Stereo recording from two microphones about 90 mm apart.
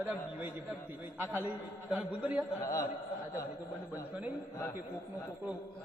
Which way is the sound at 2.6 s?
40° left (ahead or behind).